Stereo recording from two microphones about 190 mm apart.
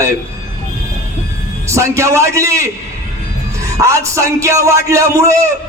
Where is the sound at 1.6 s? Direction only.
15° right (ahead or behind).